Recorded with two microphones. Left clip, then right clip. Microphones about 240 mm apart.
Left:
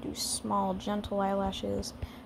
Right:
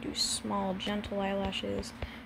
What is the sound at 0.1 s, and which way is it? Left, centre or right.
A woman's voice, centre.